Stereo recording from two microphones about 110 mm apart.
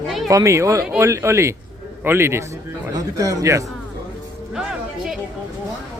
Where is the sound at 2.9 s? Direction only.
30° right (ahead or behind).